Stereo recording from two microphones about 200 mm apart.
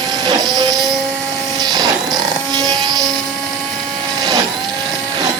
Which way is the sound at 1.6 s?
20° right (ahead or behind).